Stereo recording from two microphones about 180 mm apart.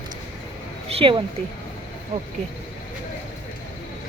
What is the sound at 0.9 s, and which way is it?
Speech, 30° right (ahead or behind).